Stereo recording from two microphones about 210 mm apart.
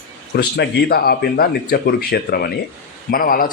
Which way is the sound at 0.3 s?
50° left (ahead or behind).